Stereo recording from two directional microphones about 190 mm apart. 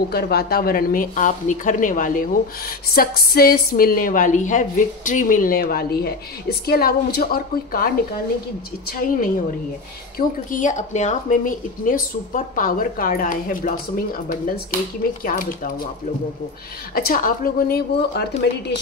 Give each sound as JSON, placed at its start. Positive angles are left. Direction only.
{"t": 0.1, "sound": "speech", "side_deg": 55}
{"t": 8.9, "sound": "speech", "side_deg": 45}
{"t": 15.2, "sound": "speech", "side_deg": 45}
{"t": 16.9, "sound": "speech", "side_deg": 45}